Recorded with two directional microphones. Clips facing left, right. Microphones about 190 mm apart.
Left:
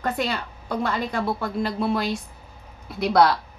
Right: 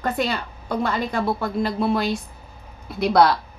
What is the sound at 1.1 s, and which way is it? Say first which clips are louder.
A woman's voice: right 2 dB; 20° right (ahead or behind).